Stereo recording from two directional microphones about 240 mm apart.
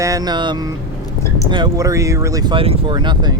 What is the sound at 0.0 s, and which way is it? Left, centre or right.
Speech, centre.